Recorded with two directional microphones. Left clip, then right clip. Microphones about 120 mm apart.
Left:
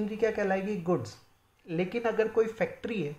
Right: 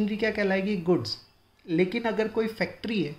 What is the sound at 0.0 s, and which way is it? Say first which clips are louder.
Speech: right 2 dB; 20° right (ahead or behind).